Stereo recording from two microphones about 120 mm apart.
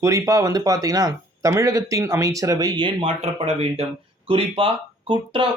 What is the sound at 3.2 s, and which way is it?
Speech, 60° right (ahead or behind).